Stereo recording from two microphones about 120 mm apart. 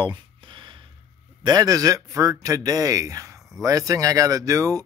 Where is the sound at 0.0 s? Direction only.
40° right (ahead or behind).